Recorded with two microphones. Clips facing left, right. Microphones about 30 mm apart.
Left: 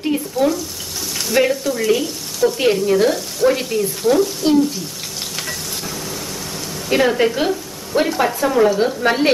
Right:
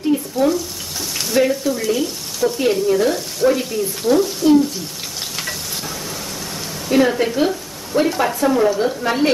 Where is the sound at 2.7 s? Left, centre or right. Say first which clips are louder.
Even; centre.